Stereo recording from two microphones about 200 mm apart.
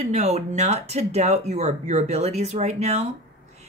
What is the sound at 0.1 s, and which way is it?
A woman's voice, 35° right (ahead or behind).